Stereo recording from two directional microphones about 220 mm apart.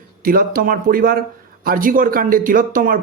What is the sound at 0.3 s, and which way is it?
Speech, 40° right (ahead or behind).